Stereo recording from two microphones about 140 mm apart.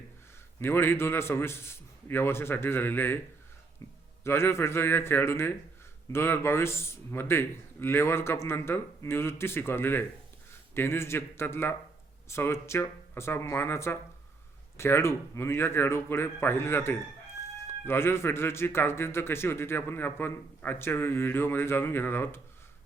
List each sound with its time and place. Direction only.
0.6 s a man's voice: 15° left (ahead or behind)